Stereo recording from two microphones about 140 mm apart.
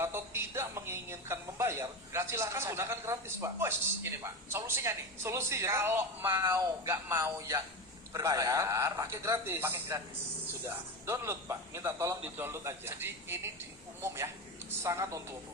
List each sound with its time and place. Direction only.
0.0 s a man's voice: 15° right (ahead or behind)
14.7 s a man's voice: 20° right (ahead or behind)